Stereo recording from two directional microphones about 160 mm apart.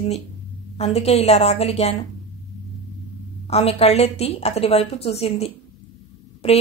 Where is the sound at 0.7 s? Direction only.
40° left (ahead or behind).